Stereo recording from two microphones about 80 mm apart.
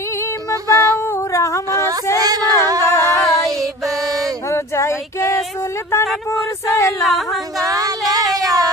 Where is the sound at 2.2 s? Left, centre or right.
Right.